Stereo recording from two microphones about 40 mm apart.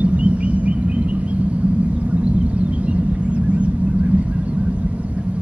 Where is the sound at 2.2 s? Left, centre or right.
Right.